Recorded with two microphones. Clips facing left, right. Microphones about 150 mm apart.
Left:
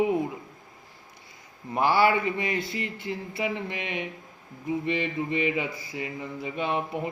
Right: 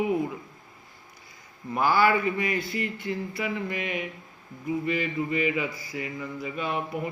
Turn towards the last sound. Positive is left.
turn(degrees=25)  # may be behind; listen again after turning